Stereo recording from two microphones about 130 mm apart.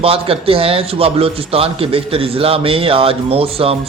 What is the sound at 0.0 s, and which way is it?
Speech, 45° right (ahead or behind).